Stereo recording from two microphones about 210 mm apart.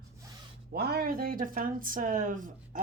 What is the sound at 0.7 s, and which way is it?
Speech, 50° right (ahead or behind).